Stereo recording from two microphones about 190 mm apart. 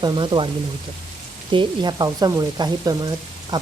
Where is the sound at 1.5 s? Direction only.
25° right (ahead or behind).